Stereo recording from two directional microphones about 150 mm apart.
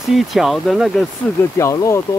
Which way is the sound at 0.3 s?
Centre (ahead or behind).